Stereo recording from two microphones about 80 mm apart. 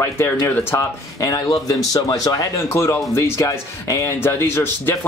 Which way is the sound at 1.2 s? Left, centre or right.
Left.